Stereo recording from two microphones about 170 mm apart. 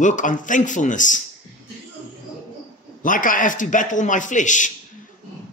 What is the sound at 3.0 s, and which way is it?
Speech, 50° left (ahead or behind).